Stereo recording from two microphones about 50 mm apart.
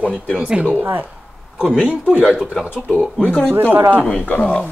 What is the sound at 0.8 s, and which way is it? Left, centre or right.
Speech, right.